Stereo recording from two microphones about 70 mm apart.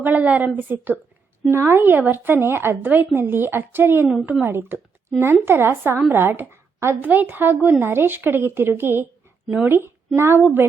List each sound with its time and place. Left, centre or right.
0.0 s speech: right